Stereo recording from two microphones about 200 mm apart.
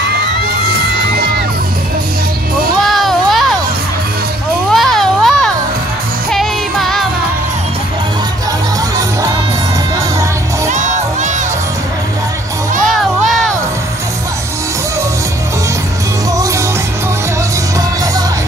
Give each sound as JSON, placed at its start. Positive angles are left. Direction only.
{"t": 2.9, "sound": "children playing", "side_deg": 0}
{"t": 4.7, "sound": "children playing", "side_deg": 0}
{"t": 6.3, "sound": "music", "side_deg": 0}
{"t": 10.7, "sound": "crowd", "side_deg": -35}